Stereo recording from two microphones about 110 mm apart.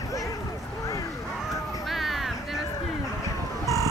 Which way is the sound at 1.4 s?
Centre (ahead or behind).